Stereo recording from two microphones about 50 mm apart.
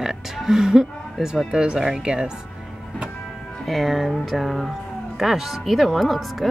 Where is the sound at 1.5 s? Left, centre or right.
Centre.